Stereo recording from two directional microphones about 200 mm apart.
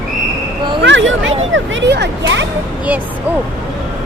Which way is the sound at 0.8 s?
65° right (ahead or behind).